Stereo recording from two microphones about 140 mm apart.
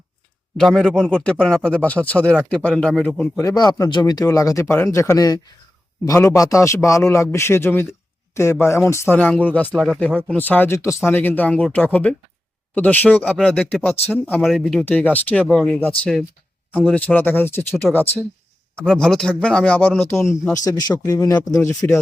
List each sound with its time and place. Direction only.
0.5 s a man's voice: centre (ahead or behind)
3.4 s a man's voice: 30° left (ahead or behind); by 9.6 s 10° left (ahead or behind)
9.7 s a man's voice: centre (ahead or behind)
10.3 s a man's voice: 10° left (ahead or behind)
14.8 s a man's voice: 10° left (ahead or behind)
18.8 s speech: 5° left (ahead or behind)
20.7 s a man's voice: 30° left (ahead or behind)